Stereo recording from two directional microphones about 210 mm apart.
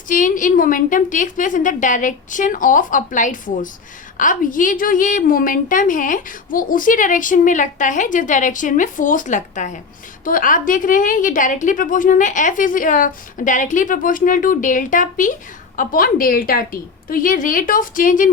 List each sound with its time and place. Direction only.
0.1 s a woman's voice: 40° left (ahead or behind)